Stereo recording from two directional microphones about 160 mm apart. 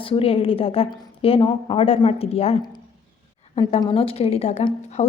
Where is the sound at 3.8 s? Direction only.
35° left (ahead or behind).